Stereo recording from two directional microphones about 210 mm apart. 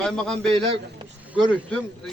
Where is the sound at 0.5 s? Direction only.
25° right (ahead or behind).